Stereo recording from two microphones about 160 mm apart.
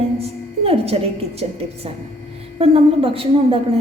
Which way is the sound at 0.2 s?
35° right (ahead or behind).